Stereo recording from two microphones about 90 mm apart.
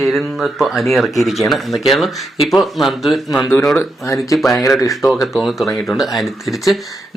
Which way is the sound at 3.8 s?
35° left (ahead or behind).